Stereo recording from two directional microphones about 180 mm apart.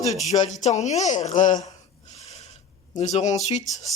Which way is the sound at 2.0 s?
35° left (ahead or behind).